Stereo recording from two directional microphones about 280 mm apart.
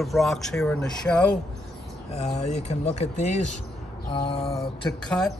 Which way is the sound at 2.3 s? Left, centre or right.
Left.